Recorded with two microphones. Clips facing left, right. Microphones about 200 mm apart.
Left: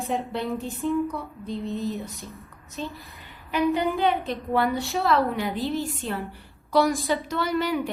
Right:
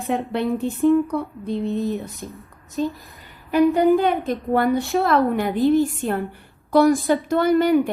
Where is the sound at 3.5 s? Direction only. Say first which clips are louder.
Right 8 dB; 45° right (ahead or behind).